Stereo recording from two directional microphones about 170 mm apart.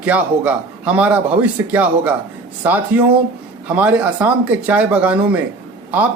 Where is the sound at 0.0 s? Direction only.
10° right (ahead or behind).